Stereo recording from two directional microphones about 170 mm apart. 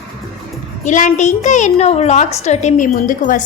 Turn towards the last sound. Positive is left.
turn(degrees=50)  # may be behind; listen again after turning